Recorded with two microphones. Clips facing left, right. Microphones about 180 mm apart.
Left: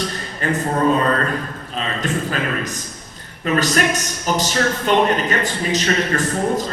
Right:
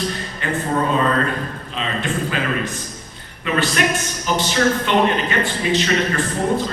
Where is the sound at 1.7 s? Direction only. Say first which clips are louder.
Left 1 dB; 40° left (ahead or behind).